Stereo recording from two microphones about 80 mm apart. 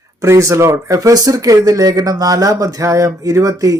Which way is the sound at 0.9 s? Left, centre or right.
Right.